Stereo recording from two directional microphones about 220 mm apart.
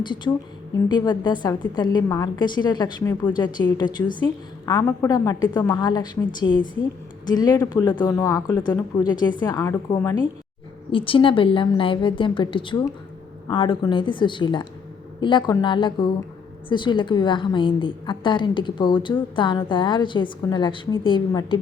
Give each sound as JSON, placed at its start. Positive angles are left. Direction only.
{"t": 0.9, "sound": "a woman's voice", "side_deg": 20}
{"t": 10.9, "sound": "a woman's voice", "side_deg": 25}